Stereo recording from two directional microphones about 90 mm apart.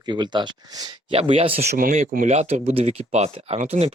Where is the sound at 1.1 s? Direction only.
85° right.